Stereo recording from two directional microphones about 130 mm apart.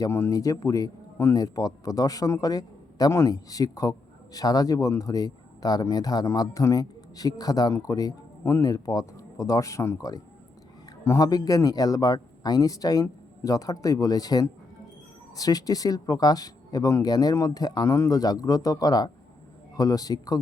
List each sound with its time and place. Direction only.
0.0 s speech: 25° left (ahead or behind)